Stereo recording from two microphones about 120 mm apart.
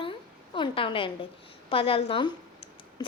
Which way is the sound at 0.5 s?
45° left (ahead or behind).